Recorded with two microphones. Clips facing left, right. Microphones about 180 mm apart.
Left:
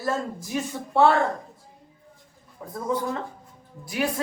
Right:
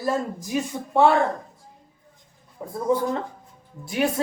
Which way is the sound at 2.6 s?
25° right (ahead or behind).